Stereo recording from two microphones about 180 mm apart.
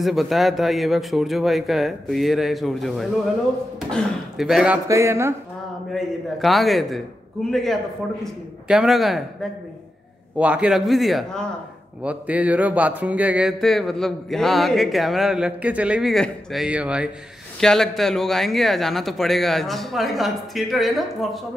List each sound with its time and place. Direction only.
0.0 s speech: centre (ahead or behind)
4.8 s speech: 15° right (ahead or behind)
5.9 s speech: centre (ahead or behind)